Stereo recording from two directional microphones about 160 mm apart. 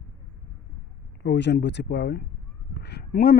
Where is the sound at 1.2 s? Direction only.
90° left.